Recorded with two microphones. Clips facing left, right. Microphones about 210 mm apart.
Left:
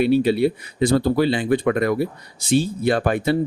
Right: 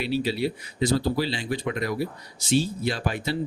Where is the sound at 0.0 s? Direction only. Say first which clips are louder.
Left 9 dB; 55° left (ahead or behind).